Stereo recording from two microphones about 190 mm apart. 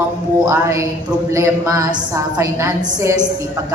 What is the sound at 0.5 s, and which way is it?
A woman's voice, 15° right (ahead or behind).